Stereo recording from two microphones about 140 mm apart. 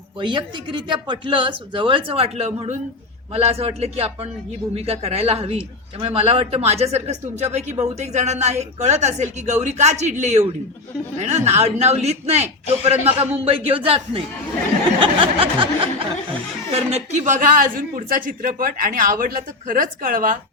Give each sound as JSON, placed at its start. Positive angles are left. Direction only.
{"t": 0.2, "sound": "a man's voice", "side_deg": -35}
{"t": 15.0, "sound": "a sound", "side_deg": -40}
{"t": 16.7, "sound": "speech", "side_deg": -50}